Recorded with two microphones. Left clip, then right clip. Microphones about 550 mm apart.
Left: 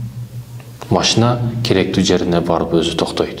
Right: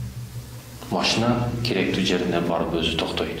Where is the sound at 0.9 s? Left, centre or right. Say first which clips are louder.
Left 7 dB; left.